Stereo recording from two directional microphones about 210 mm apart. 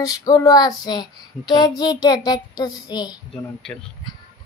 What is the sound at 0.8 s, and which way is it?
A child's voice, 20° left (ahead or behind).